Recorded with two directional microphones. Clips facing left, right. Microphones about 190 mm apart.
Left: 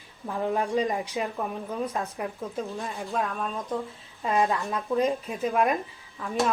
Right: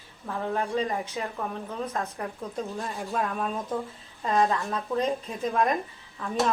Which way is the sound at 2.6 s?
Centre (ahead or behind).